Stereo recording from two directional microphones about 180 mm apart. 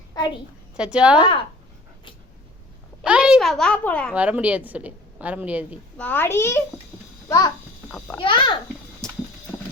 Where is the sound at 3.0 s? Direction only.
5° right (ahead or behind).